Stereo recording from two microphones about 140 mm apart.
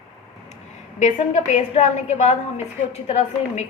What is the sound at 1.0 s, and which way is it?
A woman's voice, 55° left (ahead or behind).